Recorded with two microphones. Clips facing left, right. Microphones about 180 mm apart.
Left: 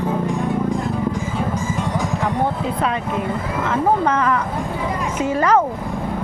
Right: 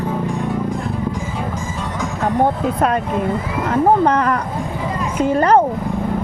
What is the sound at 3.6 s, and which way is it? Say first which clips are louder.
Speech: right 4 dB; 35° right (ahead or behind).